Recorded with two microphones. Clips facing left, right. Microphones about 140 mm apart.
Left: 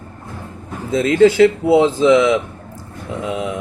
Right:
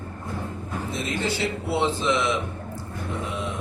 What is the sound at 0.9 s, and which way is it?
Speech, 90° left.